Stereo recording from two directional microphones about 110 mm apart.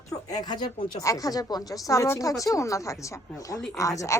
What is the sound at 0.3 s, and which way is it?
Speech, 40° left (ahead or behind).